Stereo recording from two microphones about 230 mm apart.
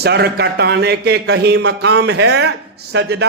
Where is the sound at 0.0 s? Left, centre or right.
Right.